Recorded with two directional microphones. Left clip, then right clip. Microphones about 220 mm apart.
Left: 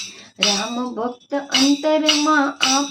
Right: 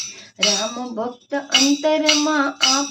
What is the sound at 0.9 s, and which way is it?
Music, 5° left (ahead or behind).